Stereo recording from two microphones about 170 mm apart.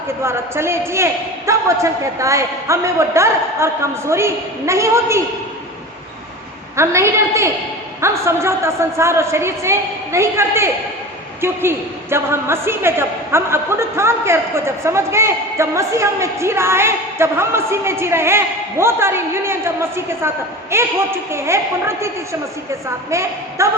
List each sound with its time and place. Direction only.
0.2 s a man's voice: 15° right (ahead or behind)
6.7 s a man's voice: 15° right (ahead or behind)